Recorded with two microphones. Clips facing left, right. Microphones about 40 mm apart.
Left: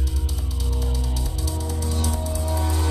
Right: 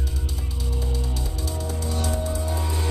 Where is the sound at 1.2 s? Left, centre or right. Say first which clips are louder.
Even; right.